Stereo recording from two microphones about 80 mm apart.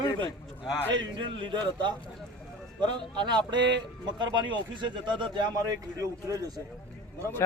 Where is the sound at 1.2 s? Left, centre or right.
Right.